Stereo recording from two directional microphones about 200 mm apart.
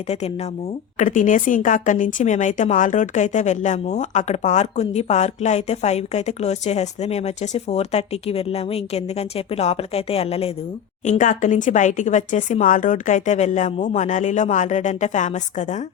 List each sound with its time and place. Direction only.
0.9 s speech: 40° left (ahead or behind)